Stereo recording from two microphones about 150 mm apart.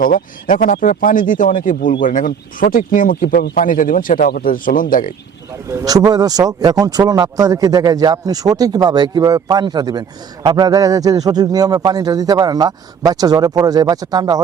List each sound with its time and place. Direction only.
0.0 s speech: 65° left (ahead or behind)
5.6 s speech: 25° right (ahead or behind)